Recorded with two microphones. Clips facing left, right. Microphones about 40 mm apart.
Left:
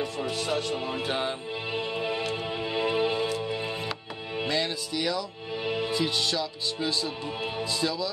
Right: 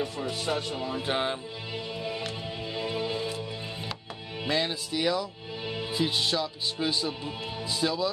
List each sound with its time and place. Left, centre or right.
0.3 s speech: centre
0.7 s music: left
1.0 s music: centre
1.7 s music: left
4.5 s music: centre